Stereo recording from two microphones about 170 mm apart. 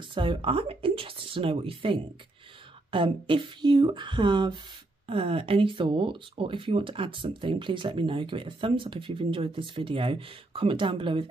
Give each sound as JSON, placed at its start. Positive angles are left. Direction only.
{"t": 0.1, "sound": "speech", "side_deg": -30}